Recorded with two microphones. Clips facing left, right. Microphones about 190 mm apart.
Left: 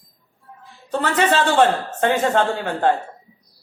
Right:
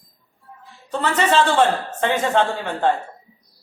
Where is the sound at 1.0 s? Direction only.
50° left (ahead or behind).